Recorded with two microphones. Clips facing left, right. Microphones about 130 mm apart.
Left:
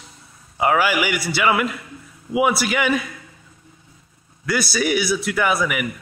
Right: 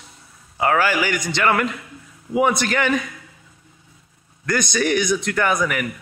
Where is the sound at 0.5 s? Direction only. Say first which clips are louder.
Even; 15° left (ahead or behind).